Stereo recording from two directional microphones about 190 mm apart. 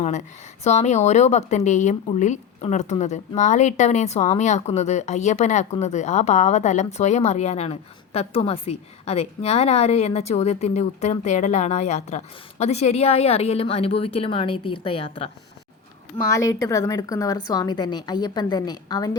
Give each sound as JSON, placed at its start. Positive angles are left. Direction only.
{"t": 0.6, "sound": "a woman's voice", "side_deg": 35}
{"t": 16.3, "sound": "a woman's voice", "side_deg": 15}